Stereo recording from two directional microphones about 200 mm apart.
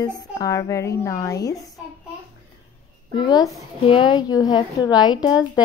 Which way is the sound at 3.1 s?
20° left (ahead or behind).